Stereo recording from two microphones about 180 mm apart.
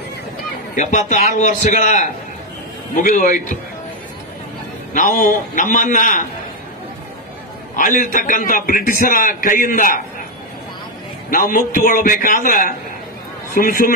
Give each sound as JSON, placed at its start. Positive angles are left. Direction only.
{"t": 0.7, "sound": "a man's voice", "side_deg": 45}
{"t": 4.9, "sound": "a man's voice", "side_deg": 50}
{"t": 7.7, "sound": "a man's voice", "side_deg": 45}
{"t": 11.2, "sound": "a man's voice", "side_deg": 50}